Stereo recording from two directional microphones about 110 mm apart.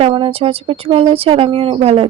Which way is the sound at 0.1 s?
55° right (ahead or behind).